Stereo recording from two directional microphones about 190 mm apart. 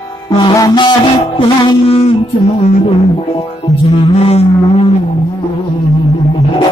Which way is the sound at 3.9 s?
35° left (ahead or behind).